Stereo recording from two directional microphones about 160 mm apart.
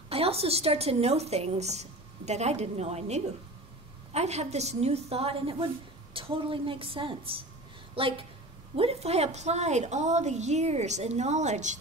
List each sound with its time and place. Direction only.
0.1 s a woman's voice: 40° right (ahead or behind)